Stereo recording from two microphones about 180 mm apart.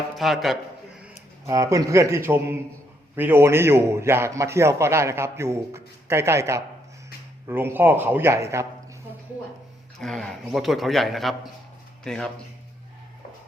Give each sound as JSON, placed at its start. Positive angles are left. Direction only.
{"t": 0.2, "sound": "a man's voice", "side_deg": 0}
{"t": 1.5, "sound": "a man's voice", "side_deg": -15}
{"t": 10.0, "sound": "a man's voice", "side_deg": 0}